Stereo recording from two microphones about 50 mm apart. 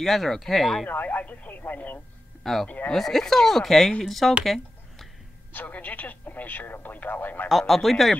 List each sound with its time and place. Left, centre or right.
0.0 s speech: centre
0.8 s speech: left
2.4 s speech: centre
5.5 s speech: left
7.4 s speech: centre